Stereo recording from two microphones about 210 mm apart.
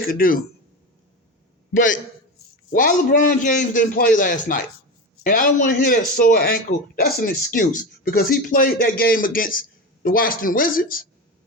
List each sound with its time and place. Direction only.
0.0 s speech: 45° left (ahead or behind)
1.7 s speech: 40° left (ahead or behind)